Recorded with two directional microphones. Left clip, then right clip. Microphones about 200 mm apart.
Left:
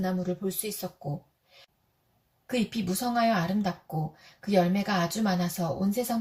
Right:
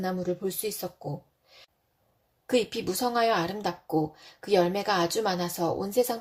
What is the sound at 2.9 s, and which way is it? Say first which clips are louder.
A woman's voice: right 1 dB; 35° right (ahead or behind).